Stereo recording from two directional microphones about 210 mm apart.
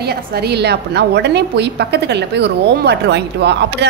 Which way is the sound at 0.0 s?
50° right (ahead or behind).